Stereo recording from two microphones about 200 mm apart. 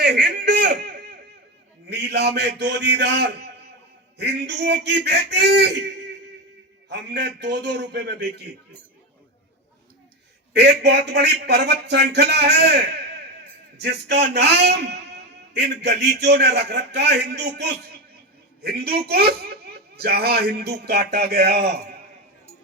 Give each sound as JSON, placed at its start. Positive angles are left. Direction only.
{"t": 0.0, "sound": "a sound", "side_deg": -55}
{"t": 1.9, "sound": "a man's voice", "side_deg": -55}
{"t": 6.9, "sound": "a man's voice", "side_deg": -55}
{"t": 10.5, "sound": "a man's voice", "side_deg": -55}